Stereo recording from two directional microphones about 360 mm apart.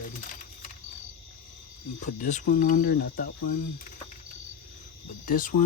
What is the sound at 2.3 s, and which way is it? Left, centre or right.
Speech, left.